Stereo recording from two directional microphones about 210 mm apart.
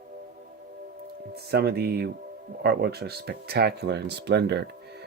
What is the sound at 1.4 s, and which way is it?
Speech, 50° right (ahead or behind).